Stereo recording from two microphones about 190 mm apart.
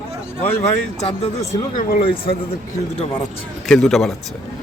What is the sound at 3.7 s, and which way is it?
Speech, centre (ahead or behind).